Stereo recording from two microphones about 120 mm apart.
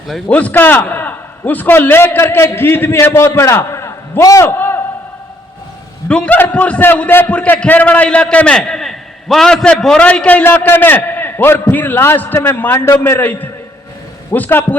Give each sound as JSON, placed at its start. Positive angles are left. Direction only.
{"t": 0.3, "sound": "a man's voice", "side_deg": 10}
{"t": 4.4, "sound": "a sound", "side_deg": 15}
{"t": 6.1, "sound": "a man's voice", "side_deg": 10}